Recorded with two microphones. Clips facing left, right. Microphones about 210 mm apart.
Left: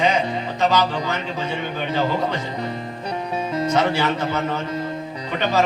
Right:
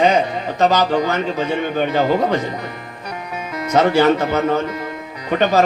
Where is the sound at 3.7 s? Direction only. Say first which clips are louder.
Right 8 dB; 45° right (ahead or behind).